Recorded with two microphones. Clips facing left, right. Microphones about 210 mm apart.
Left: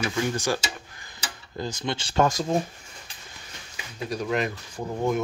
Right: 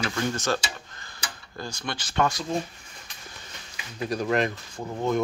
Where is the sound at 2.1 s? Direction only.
40° left (ahead or behind).